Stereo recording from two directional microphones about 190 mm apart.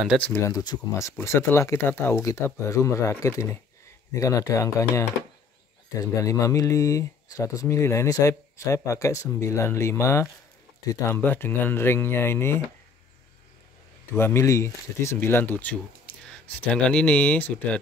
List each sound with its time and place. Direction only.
0.2 s speech: 10° left (ahead or behind)
14.1 s speech: 15° left (ahead or behind)